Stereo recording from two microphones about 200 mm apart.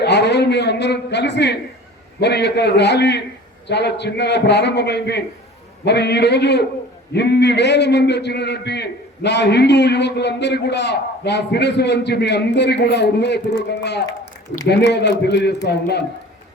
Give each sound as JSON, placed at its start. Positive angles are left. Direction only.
{"t": 0.0, "sound": "a man's voice", "side_deg": 60}